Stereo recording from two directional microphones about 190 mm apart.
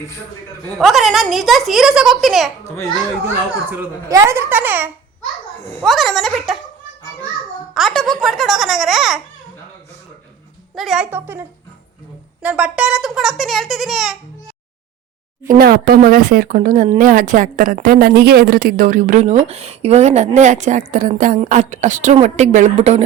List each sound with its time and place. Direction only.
0.8 s a child's voice: centre (ahead or behind)
3.7 s a woman's voice: 15° right (ahead or behind)
5.8 s a sound: centre (ahead or behind)
7.7 s a child's voice: centre (ahead or behind)
10.8 s a woman's voice: 5° right (ahead or behind)
15.4 s a woman's voice: 50° right (ahead or behind); by 23.0 s 35° right (ahead or behind)